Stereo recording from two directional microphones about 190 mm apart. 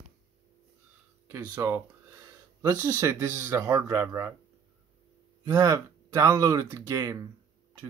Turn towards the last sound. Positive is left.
turn(degrees=-15)  # may be behind; listen again after turning